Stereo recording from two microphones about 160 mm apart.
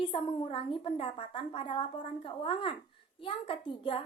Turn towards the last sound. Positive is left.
turn(degrees=30)  # may be behind; listen again after turning